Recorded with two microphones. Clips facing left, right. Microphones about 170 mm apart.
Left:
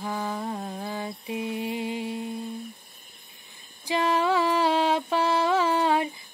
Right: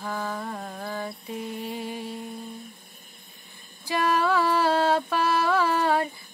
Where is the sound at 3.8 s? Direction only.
20° left (ahead or behind).